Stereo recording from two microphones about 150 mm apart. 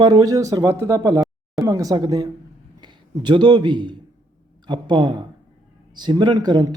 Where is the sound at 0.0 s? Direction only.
25° right (ahead or behind).